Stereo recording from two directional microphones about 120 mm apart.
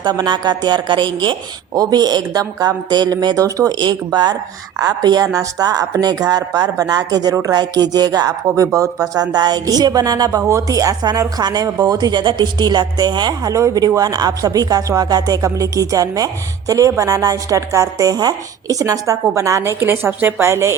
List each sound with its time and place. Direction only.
0.0 s a woman's voice: 40° right (ahead or behind); by 20.7 s 20° right (ahead or behind)